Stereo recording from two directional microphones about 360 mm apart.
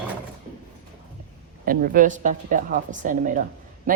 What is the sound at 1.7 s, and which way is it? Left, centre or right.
Speech, right.